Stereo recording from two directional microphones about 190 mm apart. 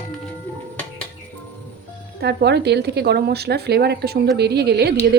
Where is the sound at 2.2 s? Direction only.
60° right (ahead or behind).